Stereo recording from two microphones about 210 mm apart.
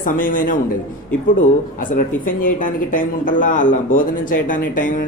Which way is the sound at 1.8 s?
40° left (ahead or behind).